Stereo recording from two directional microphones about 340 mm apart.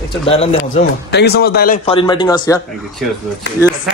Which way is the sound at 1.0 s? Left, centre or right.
Left.